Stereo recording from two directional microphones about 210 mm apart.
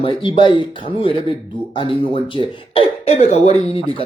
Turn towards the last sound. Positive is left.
turn(degrees=30)  # may be behind; listen again after turning